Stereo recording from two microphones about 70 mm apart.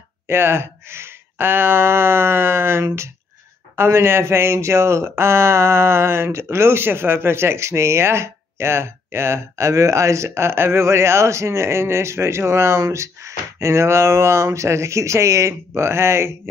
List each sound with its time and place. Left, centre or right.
0.3 s speech: right